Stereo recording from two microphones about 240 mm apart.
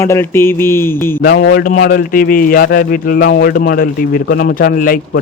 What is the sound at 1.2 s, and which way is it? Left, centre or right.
A man's voice, left.